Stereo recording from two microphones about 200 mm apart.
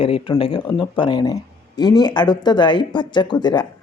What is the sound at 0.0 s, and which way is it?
Speech, 25° left (ahead or behind).